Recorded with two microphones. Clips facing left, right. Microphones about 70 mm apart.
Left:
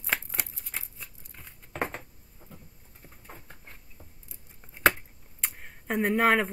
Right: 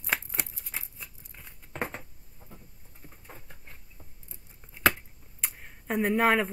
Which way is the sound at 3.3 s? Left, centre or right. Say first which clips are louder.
Left 1 dB; left.